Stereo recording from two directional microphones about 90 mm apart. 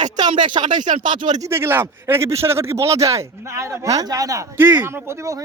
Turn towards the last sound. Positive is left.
turn(degrees=-35)  # may be behind; listen again after turning